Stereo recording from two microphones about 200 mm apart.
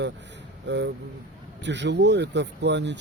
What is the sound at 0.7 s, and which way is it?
Speech, 60° right (ahead or behind).